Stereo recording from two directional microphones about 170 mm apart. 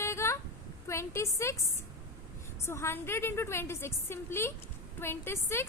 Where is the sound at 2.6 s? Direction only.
15° left (ahead or behind).